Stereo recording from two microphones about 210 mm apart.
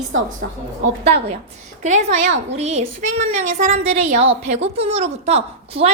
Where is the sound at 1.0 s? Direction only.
30° right (ahead or behind).